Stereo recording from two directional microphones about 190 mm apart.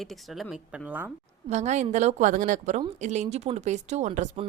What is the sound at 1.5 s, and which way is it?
A woman's voice, 35° right (ahead or behind).